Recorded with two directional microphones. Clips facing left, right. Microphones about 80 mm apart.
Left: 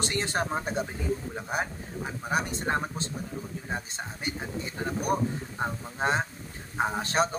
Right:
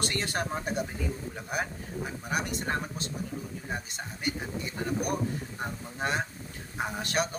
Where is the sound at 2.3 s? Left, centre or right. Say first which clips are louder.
Left 3 dB; left.